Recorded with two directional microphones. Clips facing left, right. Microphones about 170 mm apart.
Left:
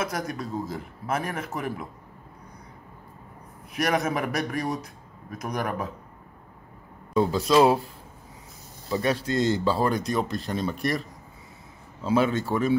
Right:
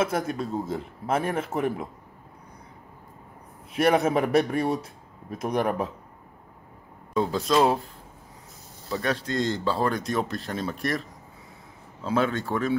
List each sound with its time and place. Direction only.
0.0 s a man's voice: 25° right (ahead or behind)
3.7 s a man's voice: 30° right (ahead or behind)
7.2 s speech: 5° left (ahead or behind)
8.9 s speech: 5° left (ahead or behind)